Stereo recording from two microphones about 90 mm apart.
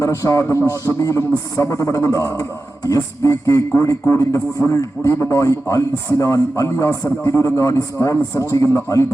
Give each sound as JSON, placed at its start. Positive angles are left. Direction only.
{"t": 0.0, "sound": "a man's voice", "side_deg": 35}